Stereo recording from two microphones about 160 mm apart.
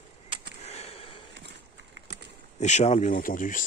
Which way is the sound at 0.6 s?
40° left (ahead or behind).